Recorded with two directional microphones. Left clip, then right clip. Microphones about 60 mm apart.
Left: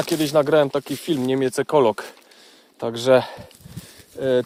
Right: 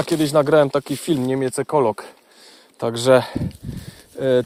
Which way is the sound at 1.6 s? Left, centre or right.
Left.